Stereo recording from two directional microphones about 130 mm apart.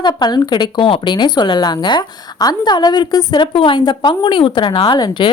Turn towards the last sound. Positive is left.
turn(degrees=35)  # may be behind; listen again after turning